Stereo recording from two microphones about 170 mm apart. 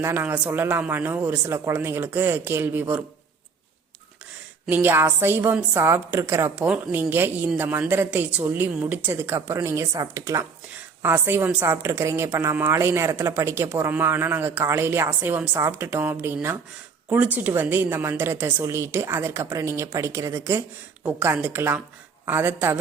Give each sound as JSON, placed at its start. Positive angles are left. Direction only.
{"t": 0.0, "sound": "a woman's voice", "side_deg": -15}
{"t": 4.6, "sound": "a woman's voice", "side_deg": -10}